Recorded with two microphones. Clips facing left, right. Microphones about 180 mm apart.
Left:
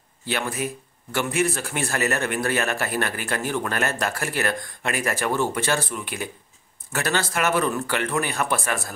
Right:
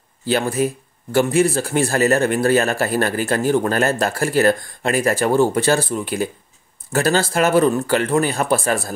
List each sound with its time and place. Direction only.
0.2 s speech: 35° right (ahead or behind)